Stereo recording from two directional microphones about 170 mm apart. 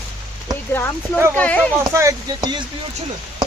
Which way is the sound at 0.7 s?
15° left (ahead or behind).